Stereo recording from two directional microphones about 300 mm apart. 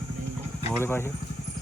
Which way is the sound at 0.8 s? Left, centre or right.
Centre.